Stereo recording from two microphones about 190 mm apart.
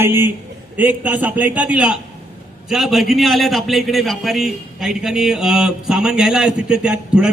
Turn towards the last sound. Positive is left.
turn(degrees=-5)  # may be behind; listen again after turning